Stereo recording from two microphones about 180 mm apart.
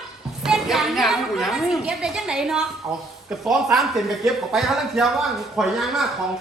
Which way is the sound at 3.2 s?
Centre (ahead or behind).